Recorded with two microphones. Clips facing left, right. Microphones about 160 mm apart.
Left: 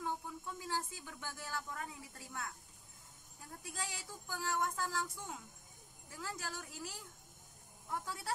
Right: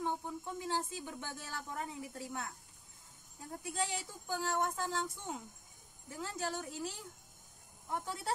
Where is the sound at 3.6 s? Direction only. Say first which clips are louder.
Right 8 dB; 25° right (ahead or behind).